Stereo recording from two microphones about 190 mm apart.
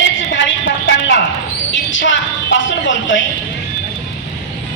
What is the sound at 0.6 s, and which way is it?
Speech, 75° left (ahead or behind).